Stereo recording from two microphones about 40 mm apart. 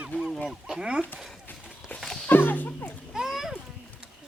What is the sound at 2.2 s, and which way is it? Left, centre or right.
Music, left.